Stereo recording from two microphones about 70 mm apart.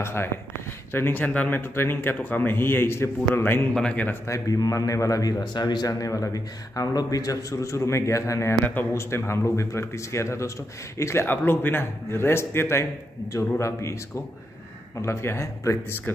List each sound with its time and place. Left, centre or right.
0.0 s a man's voice: left
1.6 s a man's voice: left
3.9 s speech: left
4.3 s speech: left
5.4 s speech: left
11.2 s a man's voice: left